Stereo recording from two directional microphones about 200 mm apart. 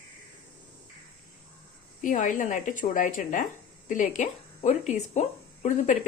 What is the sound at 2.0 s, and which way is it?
Speech, 40° left (ahead or behind).